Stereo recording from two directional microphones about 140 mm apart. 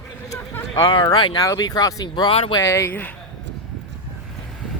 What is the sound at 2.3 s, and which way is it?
Speech, 45° left (ahead or behind).